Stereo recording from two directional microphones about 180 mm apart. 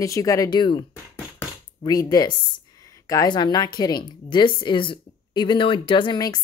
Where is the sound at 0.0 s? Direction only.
15° left (ahead or behind).